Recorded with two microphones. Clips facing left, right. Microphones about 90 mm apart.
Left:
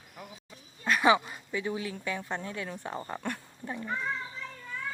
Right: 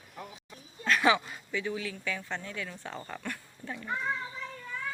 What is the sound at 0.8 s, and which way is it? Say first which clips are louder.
Speech: left 2 dB; 15° left (ahead or behind).